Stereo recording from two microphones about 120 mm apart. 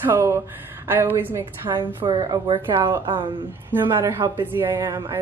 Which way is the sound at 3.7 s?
20° right (ahead or behind).